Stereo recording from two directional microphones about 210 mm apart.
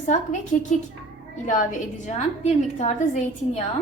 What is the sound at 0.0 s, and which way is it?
Speech, 35° left (ahead or behind).